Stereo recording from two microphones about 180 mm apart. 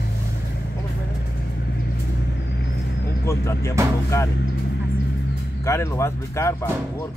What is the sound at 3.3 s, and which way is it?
Speech, 15° left (ahead or behind).